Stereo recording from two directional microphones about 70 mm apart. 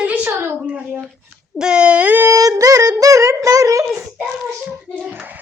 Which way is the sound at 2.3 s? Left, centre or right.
Right.